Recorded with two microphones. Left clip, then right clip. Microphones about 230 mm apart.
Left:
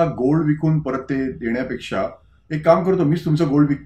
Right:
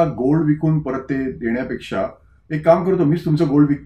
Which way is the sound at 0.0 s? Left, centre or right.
Centre.